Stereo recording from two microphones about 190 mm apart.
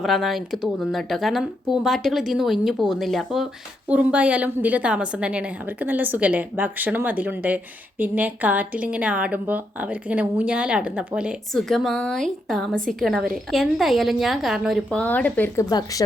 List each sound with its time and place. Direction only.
0.0 s a woman's voice: centre (ahead or behind); by 16.0 s 20° left (ahead or behind)